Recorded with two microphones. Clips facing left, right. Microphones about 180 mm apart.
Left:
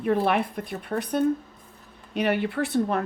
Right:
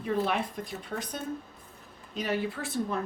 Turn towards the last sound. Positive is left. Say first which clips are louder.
# left 7 dB
turn(degrees=65)  # may be behind; listen again after turning